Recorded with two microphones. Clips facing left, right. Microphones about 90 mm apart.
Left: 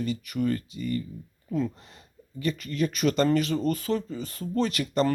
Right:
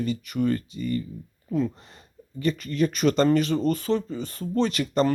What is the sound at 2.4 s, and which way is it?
Speech, 35° right (ahead or behind).